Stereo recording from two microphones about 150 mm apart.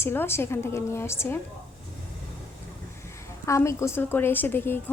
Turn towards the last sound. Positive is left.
turn(degrees=15)  # may be behind; listen again after turning